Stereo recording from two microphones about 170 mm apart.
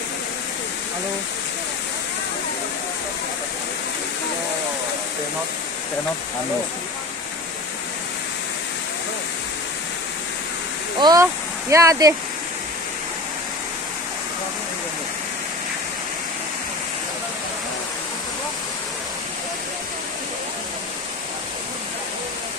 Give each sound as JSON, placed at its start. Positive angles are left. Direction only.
{"t": 11.0, "sound": "speech", "side_deg": -25}